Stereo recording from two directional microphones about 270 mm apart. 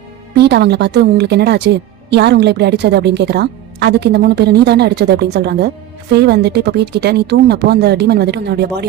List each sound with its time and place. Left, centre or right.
0.3 s a woman's voice: right